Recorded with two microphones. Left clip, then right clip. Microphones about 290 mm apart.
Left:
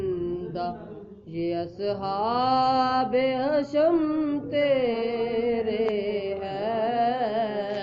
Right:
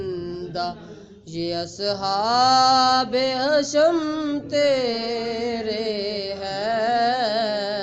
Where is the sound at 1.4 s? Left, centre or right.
Right.